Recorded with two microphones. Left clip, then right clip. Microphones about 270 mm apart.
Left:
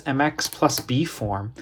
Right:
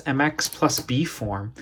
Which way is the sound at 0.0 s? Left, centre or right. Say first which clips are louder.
Even; centre.